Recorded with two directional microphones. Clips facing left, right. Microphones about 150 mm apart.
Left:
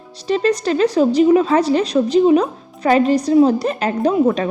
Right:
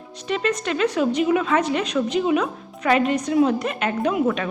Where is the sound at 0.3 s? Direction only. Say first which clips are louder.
Left 7 dB; 35° left (ahead or behind).